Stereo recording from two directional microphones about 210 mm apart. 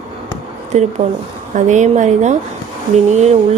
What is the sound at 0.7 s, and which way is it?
Speech, 35° right (ahead or behind).